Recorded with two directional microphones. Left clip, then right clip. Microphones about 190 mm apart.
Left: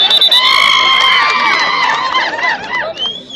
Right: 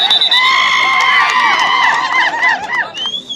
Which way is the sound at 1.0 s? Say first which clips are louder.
Even; 35° right (ahead or behind).